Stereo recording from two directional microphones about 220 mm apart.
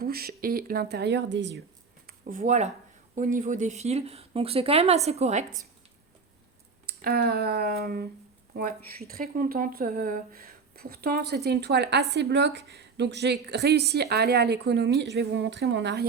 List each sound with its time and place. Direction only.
0.0 s a woman's voice: 45° right (ahead or behind)
2.0 s speech: 35° right (ahead or behind)
6.8 s a woman's voice: 45° right (ahead or behind)